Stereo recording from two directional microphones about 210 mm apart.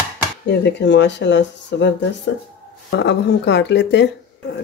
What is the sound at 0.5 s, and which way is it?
Speech, 55° left (ahead or behind).